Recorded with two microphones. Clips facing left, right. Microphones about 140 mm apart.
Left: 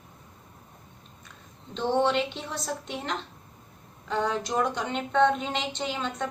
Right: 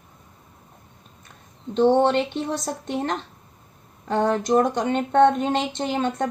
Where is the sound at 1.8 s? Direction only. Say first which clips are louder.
Right 7 dB; 55° right (ahead or behind).